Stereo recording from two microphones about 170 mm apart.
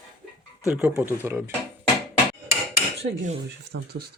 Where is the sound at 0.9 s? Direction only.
15° right (ahead or behind).